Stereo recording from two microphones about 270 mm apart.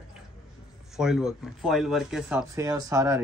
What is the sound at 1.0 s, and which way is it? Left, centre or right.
Speech, centre.